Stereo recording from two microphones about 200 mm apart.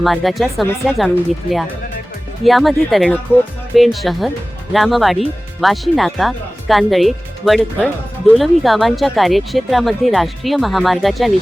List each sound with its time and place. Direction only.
0.0 s speech: centre (ahead or behind)